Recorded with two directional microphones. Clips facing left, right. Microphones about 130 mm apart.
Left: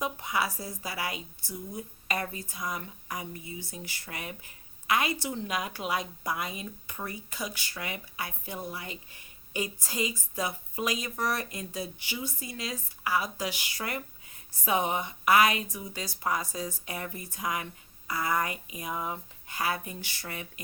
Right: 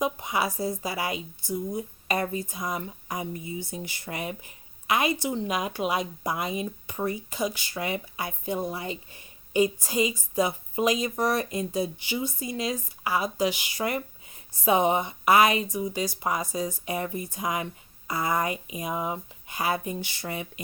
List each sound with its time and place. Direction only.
0.0 s a woman's voice: 20° right (ahead or behind)